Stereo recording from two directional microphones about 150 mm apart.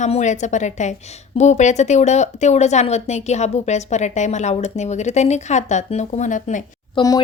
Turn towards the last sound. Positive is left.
turn(degrees=25)  # may be behind; listen again after turning